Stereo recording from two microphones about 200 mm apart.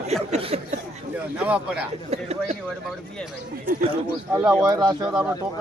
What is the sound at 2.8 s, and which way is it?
Speech, centre (ahead or behind).